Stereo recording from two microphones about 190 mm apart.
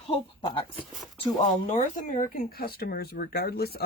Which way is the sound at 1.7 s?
40° left (ahead or behind).